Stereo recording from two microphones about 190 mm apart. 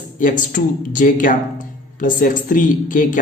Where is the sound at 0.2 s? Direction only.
45° left (ahead or behind).